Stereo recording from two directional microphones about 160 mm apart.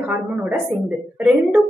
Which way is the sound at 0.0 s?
10° right (ahead or behind).